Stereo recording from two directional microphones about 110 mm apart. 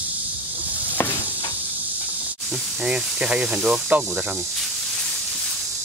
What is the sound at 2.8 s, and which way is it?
Speech, 10° right (ahead or behind).